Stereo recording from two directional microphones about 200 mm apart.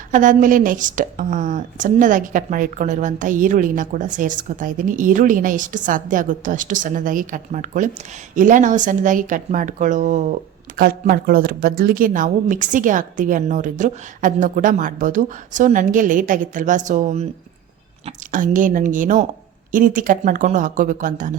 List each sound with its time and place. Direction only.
0.1 s a woman's voice: 40° right (ahead or behind)